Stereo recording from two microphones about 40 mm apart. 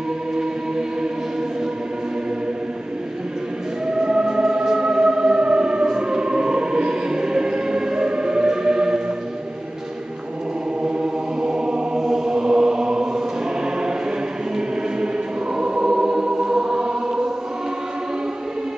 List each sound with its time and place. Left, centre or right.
3.8 s music: centre
10.8 s chant: centre
15.5 s choir: centre